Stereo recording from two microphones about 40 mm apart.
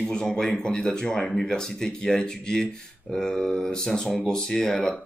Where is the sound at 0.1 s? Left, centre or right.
Centre.